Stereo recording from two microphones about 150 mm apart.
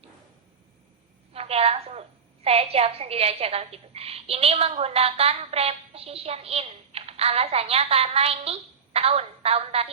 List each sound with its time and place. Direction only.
1.3 s a woman's voice: 40° right (ahead or behind)